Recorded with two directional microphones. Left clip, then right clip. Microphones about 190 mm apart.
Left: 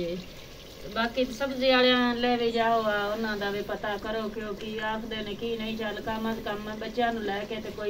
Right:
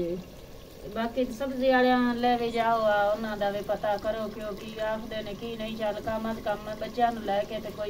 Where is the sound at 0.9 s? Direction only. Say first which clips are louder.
Left 2 dB; 45° right (ahead or behind).